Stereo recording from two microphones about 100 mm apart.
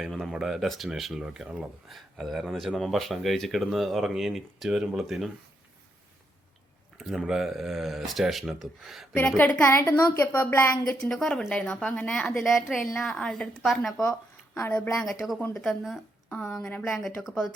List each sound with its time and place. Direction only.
0.0 s speech: centre (ahead or behind)
6.9 s speech: centre (ahead or behind)
9.1 s a woman's voice: 15° left (ahead or behind)
11.0 s a woman's voice: 5° left (ahead or behind)